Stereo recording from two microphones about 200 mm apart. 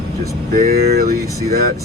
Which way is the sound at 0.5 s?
50° right (ahead or behind).